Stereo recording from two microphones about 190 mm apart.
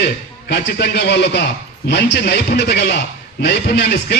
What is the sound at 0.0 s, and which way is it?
A man's voice, 65° left (ahead or behind).